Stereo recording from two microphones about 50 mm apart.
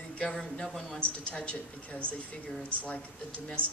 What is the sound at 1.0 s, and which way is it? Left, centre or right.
A woman's voice, left.